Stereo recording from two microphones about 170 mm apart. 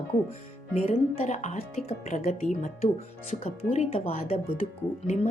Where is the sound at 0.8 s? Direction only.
40° left (ahead or behind).